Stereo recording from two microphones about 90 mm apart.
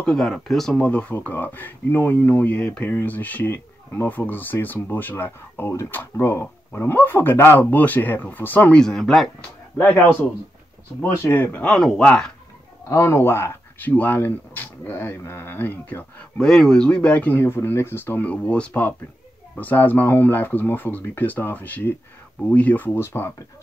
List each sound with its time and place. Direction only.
0.0 s speech: 5° left (ahead or behind)
0.7 s speech: 15° left (ahead or behind)
8.8 s speech: 5° left (ahead or behind)
9.8 s speech: 20° left (ahead or behind)
11.2 s speech: 15° left (ahead or behind)
11.7 s speech: 5° left (ahead or behind)
12.8 s speech: 35° left (ahead or behind)
16.3 s speech: 5° left (ahead or behind); by 23.3 s 30° left (ahead or behind)